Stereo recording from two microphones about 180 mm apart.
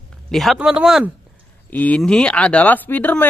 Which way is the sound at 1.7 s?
10° left (ahead or behind).